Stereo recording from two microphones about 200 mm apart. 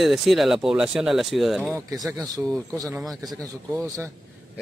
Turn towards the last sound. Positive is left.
turn(degrees=-15)  # may be behind; listen again after turning